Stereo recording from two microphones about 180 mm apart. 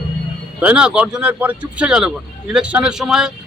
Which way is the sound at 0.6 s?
5° right (ahead or behind).